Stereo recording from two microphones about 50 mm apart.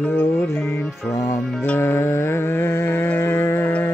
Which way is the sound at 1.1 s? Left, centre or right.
Left.